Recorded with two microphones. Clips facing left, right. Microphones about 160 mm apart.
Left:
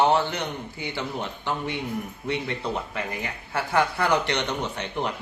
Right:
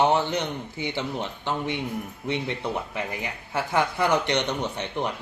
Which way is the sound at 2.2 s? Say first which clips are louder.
Right 1 dB; 20° right (ahead or behind).